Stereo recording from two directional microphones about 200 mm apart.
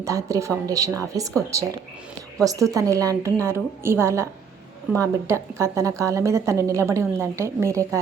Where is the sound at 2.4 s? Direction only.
15° right (ahead or behind).